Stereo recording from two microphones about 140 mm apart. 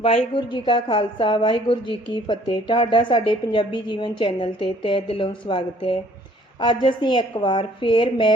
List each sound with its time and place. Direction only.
0.0 s a woman's voice: 35° left (ahead or behind)